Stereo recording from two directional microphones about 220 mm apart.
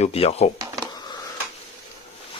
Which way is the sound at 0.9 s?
20° left (ahead or behind).